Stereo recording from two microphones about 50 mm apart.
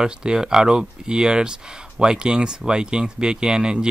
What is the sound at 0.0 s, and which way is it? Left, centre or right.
Speech, centre.